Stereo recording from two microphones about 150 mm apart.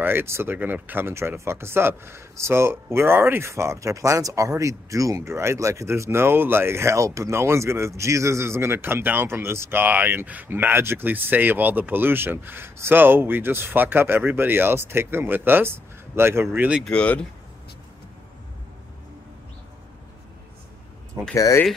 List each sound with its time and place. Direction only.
0.0 s speech: 15° right (ahead or behind)
16.8 s speech: 10° left (ahead or behind)
21.4 s speech: 20° left (ahead or behind)